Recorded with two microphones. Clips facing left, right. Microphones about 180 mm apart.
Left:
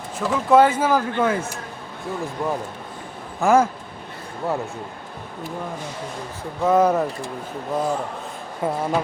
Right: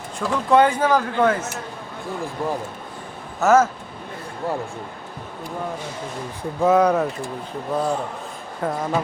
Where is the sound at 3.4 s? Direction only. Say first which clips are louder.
Right 1 dB; 15° left (ahead or behind).